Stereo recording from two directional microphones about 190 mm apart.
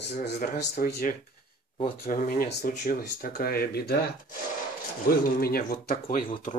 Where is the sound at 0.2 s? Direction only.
60° left (ahead or behind).